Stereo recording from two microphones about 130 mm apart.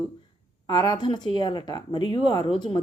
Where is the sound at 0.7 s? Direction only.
35° left (ahead or behind).